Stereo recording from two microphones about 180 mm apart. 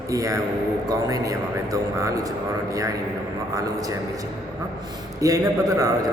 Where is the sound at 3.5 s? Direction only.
20° right (ahead or behind).